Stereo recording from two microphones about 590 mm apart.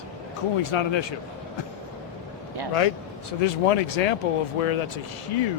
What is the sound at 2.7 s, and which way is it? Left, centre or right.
Speech, left.